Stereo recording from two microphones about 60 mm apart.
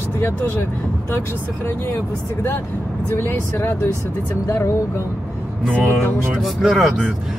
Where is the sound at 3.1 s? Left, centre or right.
Left.